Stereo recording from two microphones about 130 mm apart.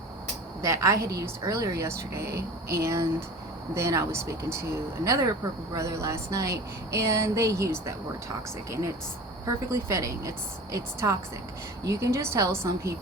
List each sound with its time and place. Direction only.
0.6 s speech: 25° right (ahead or behind)
9.7 s speech: 25° right (ahead or behind)